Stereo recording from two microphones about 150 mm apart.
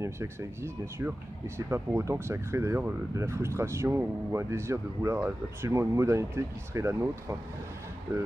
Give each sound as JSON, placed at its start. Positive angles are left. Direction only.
{"t": 0.0, "sound": "speech", "side_deg": -20}